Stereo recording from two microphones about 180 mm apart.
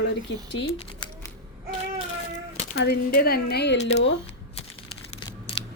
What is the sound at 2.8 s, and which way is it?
Speech, 55° left (ahead or behind).